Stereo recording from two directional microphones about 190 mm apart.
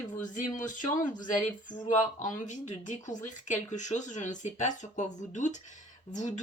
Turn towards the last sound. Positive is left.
turn(degrees=40)  # may be behind; listen again after turning